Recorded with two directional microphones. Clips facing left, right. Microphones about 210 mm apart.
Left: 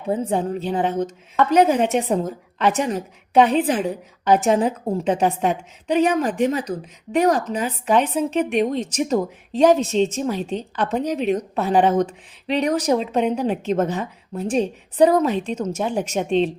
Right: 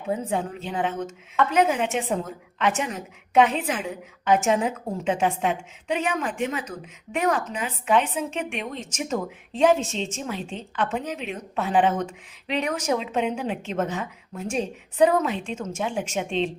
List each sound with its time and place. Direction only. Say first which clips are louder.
0.1 s a woman's voice: left 5 dB; 35° left (ahead or behind)